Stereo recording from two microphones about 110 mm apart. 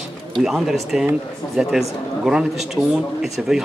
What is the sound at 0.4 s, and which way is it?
A man's voice, 5° right (ahead or behind).